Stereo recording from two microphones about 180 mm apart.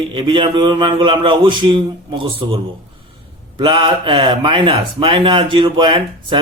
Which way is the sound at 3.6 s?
30° right (ahead or behind).